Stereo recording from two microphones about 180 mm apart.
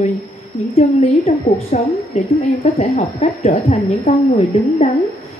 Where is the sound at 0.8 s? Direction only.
35° left (ahead or behind).